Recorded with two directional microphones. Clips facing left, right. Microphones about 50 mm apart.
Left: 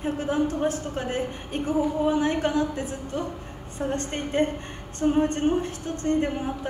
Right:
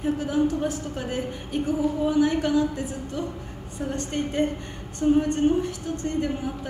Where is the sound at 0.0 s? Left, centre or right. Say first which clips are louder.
Right 2 dB; left.